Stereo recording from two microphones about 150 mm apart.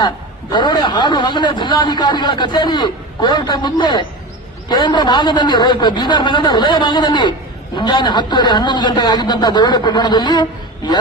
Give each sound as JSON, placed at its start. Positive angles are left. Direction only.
{"t": 0.5, "sound": "a man's voice", "side_deg": 30}